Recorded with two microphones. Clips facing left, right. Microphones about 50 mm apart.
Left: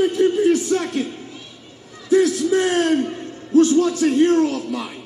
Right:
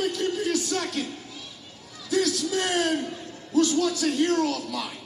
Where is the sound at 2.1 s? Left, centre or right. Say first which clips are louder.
Left 9 dB; left.